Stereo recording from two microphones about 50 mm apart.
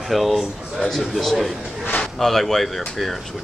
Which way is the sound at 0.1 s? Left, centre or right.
Centre.